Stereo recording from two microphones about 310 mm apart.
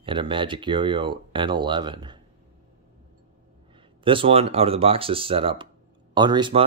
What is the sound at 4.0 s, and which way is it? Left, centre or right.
Speech, centre.